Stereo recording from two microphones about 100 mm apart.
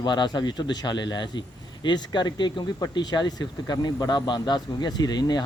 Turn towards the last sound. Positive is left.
turn(degrees=45)  # may be behind; listen again after turning